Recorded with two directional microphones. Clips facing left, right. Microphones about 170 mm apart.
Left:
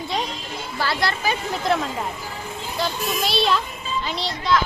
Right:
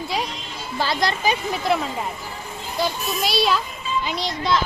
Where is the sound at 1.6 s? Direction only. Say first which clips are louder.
Left 1 dB; 5° right (ahead or behind).